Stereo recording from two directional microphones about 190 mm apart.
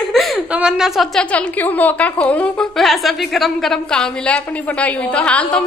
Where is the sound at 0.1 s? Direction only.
Centre (ahead or behind).